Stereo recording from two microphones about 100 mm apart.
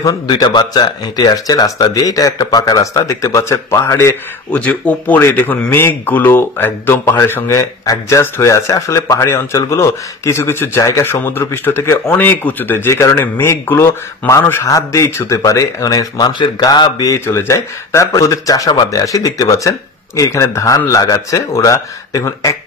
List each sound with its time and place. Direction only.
0.0 s speech: 45° left (ahead or behind); by 4.2 s 25° left (ahead or behind)
4.5 s speech: 15° left (ahead or behind); by 17.1 s 40° left (ahead or behind)
17.1 s speech: 30° left (ahead or behind)